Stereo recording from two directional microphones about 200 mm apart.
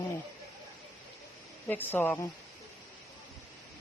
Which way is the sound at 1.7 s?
10° left (ahead or behind).